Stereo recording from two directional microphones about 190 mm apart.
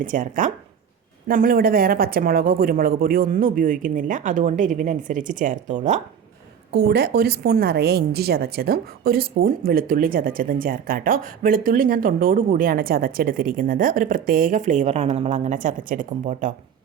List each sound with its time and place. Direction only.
0.0 s a woman's voice: 45° right (ahead or behind)
6.7 s a woman's voice: 55° right (ahead or behind)